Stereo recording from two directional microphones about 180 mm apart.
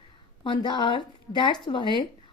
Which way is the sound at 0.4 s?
25° left (ahead or behind).